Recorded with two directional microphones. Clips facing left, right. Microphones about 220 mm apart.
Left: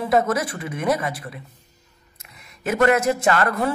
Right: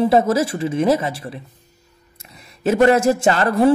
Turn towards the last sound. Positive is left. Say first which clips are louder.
# right 5 dB
turn(degrees=-30)  # may be behind; listen again after turning